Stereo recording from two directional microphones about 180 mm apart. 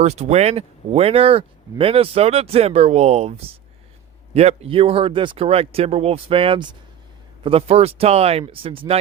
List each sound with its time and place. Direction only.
0.0 s speech: 40° right (ahead or behind)